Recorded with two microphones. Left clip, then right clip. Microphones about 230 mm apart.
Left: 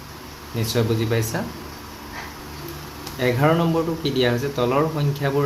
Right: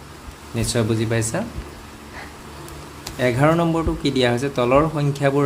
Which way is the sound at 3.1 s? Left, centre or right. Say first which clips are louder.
Right 2 dB; right.